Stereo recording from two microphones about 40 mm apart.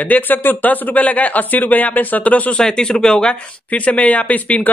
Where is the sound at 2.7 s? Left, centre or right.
Centre.